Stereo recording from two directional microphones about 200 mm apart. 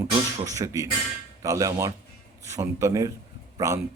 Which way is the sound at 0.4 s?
15° right (ahead or behind).